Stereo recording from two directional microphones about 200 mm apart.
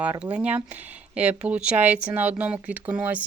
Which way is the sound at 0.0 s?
5° right (ahead or behind).